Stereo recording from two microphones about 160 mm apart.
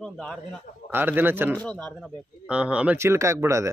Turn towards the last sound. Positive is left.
turn(degrees=-20)  # may be behind; listen again after turning